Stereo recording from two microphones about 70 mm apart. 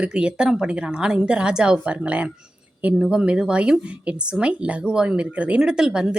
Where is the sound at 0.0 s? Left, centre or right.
Centre.